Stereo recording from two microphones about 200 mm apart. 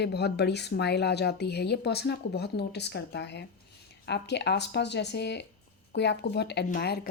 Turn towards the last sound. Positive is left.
turn(degrees=50)  # may be behind; listen again after turning